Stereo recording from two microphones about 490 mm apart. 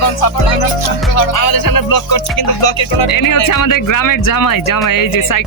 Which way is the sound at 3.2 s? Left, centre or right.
Left.